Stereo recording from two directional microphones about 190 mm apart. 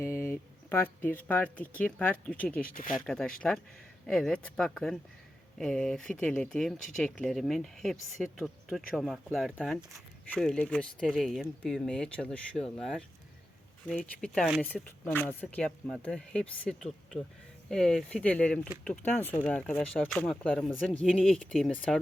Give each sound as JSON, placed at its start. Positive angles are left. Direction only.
{"t": 0.0, "sound": "speech", "side_deg": 15}
{"t": 2.7, "sound": "speech", "side_deg": 45}
{"t": 3.1, "sound": "speech", "side_deg": 5}